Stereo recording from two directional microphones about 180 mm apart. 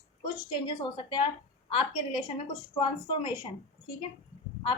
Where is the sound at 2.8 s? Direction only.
25° left (ahead or behind).